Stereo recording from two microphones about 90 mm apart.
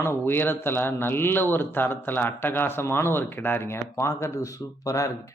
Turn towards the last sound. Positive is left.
turn(degrees=40)  # may be behind; listen again after turning